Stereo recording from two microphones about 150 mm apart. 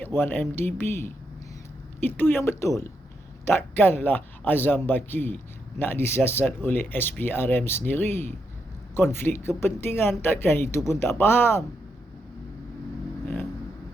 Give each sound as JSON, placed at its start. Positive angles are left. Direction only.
{"t": 0.0, "sound": "speech", "side_deg": 15}